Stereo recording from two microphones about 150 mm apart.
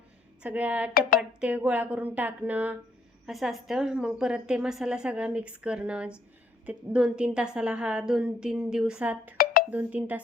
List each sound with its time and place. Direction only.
0.4 s a woman's voice: 10° right (ahead or behind)
9.4 s music: 75° left (ahead or behind)
9.6 s a woman's voice: 10° right (ahead or behind)